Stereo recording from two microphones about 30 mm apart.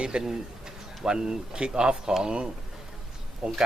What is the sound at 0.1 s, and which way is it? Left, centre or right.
Speech, right.